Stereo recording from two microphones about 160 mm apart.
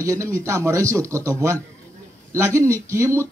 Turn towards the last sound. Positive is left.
turn(degrees=-15)  # may be behind; listen again after turning